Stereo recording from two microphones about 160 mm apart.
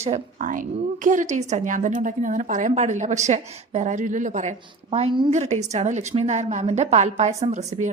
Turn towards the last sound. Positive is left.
turn(degrees=-45)  # may be behind; listen again after turning